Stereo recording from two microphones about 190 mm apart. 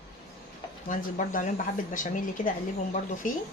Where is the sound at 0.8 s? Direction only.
45° left (ahead or behind).